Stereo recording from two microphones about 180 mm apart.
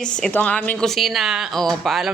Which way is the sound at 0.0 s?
5° left (ahead or behind).